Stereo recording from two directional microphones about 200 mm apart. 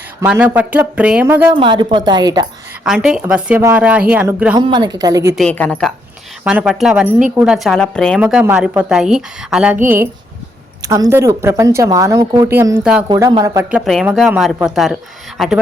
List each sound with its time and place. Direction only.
0.2 s speech: 10° right (ahead or behind)
1.5 s speech: 25° right (ahead or behind)
2.8 s a woman's voice: 5° right (ahead or behind)
4.5 s speech: 25° right (ahead or behind)
5.4 s a woman's voice: 5° left (ahead or behind)
6.4 s a woman's voice: 5° right (ahead or behind)
8.2 s a woman's voice: 5° right (ahead or behind)
13.1 s speech: 20° right (ahead or behind)
13.7 s a woman's voice: 5° right (ahead or behind)